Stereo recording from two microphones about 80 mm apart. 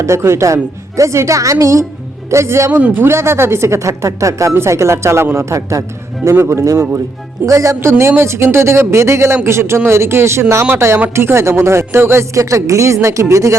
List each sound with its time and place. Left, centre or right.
0.0 s speech: right
2.7 s speech: right